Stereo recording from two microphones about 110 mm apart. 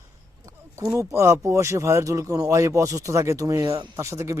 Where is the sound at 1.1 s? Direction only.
25° right (ahead or behind).